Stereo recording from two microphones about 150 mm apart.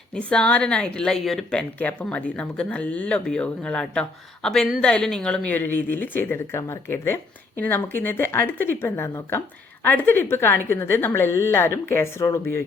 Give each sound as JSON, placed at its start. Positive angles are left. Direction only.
{"t": 0.1, "sound": "speech", "side_deg": 10}